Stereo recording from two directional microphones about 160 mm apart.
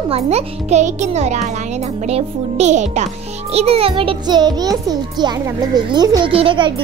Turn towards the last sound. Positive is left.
turn(degrees=-35)  # may be behind; listen again after turning